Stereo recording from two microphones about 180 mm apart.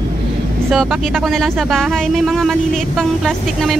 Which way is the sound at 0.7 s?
Centre (ahead or behind).